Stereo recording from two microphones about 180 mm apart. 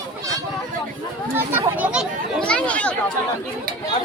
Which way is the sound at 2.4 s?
5° left (ahead or behind).